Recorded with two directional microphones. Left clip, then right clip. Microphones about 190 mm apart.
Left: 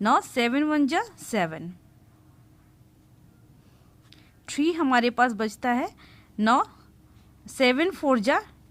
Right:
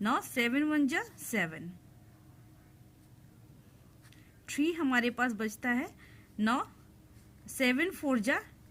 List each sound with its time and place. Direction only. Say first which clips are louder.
0.0 s a woman's voice: left 9 dB; 45° left (ahead or behind)
4.1 s a woman's voice: left 5 dB; 45° left (ahead or behind)